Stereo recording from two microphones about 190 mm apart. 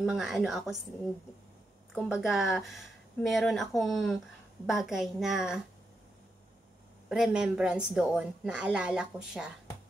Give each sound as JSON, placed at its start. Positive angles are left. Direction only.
{"t": 0.0, "sound": "a woman's voice", "side_deg": 0}
{"t": 2.0, "sound": "a woman's voice", "side_deg": -5}
{"t": 7.1, "sound": "a woman's voice", "side_deg": -5}